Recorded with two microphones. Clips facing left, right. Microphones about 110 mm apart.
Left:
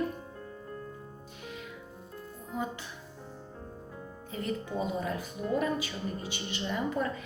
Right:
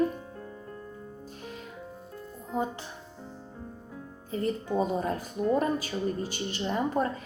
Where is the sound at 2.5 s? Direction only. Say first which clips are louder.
Right 5 dB; 35° right (ahead or behind).